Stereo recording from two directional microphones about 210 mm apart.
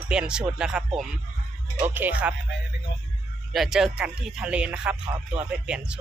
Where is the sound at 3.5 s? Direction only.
Centre (ahead or behind).